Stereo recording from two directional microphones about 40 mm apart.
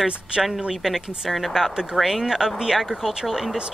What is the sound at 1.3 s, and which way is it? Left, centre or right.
A man's voice, centre.